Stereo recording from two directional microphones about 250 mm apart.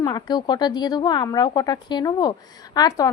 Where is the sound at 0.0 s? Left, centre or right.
Centre.